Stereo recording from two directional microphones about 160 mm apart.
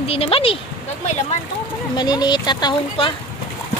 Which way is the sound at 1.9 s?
25° left (ahead or behind).